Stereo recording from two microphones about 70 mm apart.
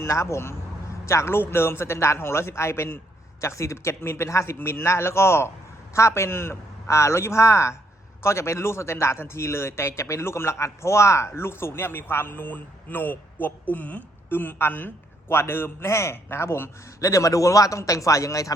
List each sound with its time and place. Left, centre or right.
0.0 s a man's voice: left